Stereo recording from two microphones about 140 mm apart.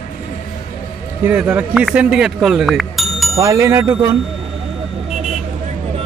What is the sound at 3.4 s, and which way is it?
Speech, 20° right (ahead or behind).